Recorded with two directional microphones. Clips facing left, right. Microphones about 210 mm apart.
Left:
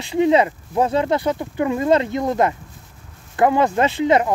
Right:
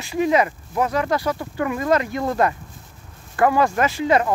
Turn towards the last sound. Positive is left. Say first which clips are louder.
# left 2 dB
turn(degrees=20)  # may be behind; listen again after turning